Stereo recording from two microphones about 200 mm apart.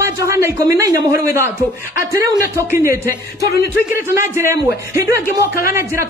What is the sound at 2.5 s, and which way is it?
Speech, 15° right (ahead or behind).